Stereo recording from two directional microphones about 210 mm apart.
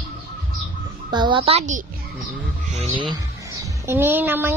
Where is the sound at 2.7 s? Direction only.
30° right (ahead or behind).